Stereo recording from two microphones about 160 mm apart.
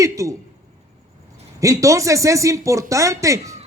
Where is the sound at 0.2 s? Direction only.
20° right (ahead or behind).